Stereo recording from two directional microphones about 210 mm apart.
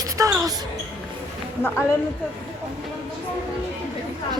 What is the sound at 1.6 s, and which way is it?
Speech, 10° left (ahead or behind).